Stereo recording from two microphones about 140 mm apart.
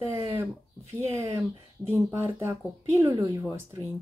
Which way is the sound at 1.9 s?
15° right (ahead or behind).